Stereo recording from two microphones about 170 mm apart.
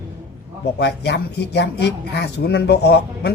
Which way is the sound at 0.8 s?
80° left.